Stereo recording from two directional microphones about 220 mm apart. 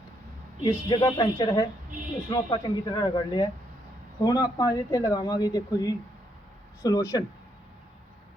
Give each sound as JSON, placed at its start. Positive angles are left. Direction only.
{"t": 0.6, "sound": "a man's voice", "side_deg": 20}